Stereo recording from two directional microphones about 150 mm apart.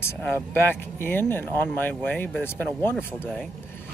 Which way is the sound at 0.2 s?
15° left (ahead or behind).